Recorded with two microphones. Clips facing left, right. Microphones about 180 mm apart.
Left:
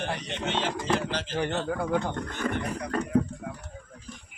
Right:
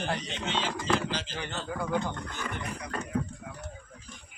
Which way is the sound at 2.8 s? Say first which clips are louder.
Left 7 dB; 40° left (ahead or behind).